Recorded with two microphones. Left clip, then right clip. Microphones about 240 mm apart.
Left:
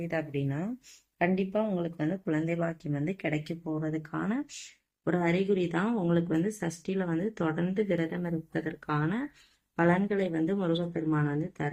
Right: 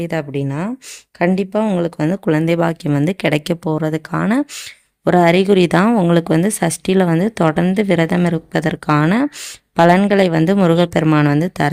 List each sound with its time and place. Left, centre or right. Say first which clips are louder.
0.0 s speech: right 11 dB; right